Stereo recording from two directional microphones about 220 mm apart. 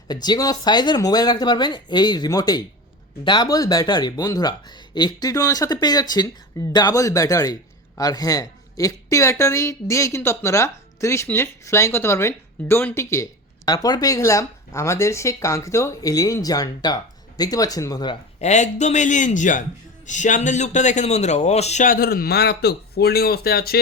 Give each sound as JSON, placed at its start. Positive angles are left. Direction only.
{"t": 0.1, "sound": "a man's voice", "side_deg": 20}